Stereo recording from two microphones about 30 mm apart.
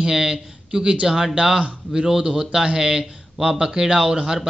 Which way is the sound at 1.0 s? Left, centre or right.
Centre.